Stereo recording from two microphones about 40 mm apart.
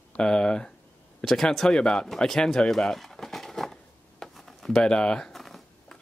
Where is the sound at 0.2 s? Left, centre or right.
Left.